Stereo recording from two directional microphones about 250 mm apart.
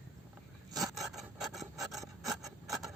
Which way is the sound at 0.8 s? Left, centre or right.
Centre.